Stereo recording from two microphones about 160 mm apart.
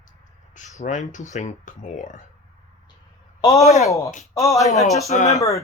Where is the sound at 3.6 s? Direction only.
45° left (ahead or behind).